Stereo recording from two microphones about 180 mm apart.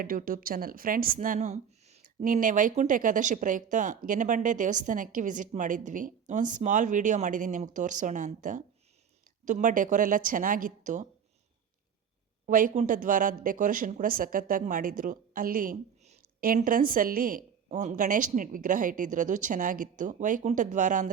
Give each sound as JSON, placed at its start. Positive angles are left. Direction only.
{"t": 0.0, "sound": "speech", "side_deg": -50}
{"t": 12.5, "sound": "speech", "side_deg": -50}